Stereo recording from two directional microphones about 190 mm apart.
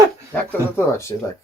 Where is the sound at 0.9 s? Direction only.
15° left (ahead or behind).